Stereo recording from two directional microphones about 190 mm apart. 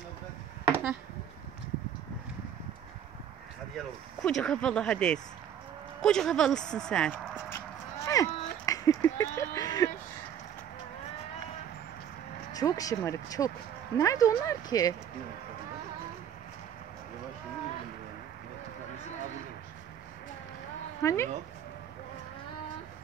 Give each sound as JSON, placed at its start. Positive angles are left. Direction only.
{"t": 0.7, "sound": "chop", "side_deg": -10}
{"t": 3.7, "sound": "speech", "side_deg": 5}
{"t": 5.9, "sound": "walk", "side_deg": 5}
{"t": 8.6, "sound": "a sound", "side_deg": 20}
{"t": 12.5, "sound": "speech", "side_deg": 20}
{"t": 21.0, "sound": "speech", "side_deg": 15}